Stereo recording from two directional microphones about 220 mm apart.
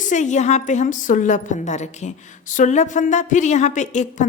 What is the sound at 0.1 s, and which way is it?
A woman's voice, 35° left (ahead or behind).